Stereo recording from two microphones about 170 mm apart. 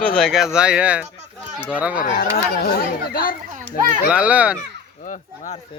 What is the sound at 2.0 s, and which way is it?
Speech, 60° left (ahead or behind).